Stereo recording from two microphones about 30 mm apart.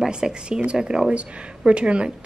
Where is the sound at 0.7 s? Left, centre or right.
Centre.